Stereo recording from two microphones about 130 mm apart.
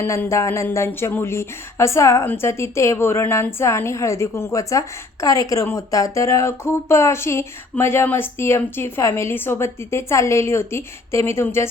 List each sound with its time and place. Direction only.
0.0 s speech: 20° left (ahead or behind)